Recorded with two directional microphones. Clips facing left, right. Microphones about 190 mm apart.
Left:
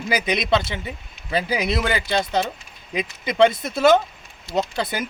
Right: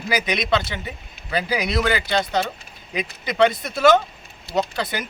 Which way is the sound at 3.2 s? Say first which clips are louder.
Left 2 dB; 25° left (ahead or behind).